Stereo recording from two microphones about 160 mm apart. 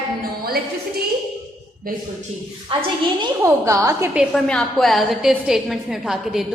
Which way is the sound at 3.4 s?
20° right (ahead or behind).